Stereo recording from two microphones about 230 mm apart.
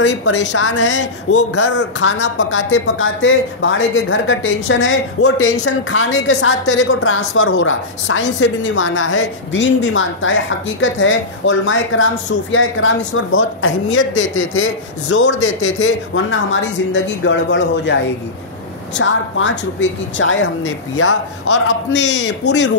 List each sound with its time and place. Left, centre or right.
0.5 s speech: left
2.0 s speech: left
18.9 s speech: left